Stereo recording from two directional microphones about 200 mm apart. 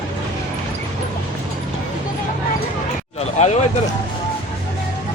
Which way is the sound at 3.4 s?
35° left (ahead or behind).